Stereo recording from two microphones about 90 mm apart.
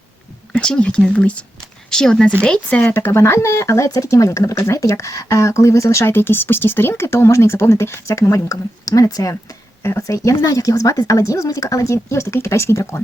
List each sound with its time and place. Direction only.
0.5 s speech: 10° left (ahead or behind)
3.0 s speech: 30° left (ahead or behind)